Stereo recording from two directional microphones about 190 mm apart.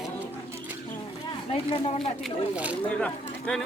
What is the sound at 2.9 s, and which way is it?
Speech, 5° left (ahead or behind).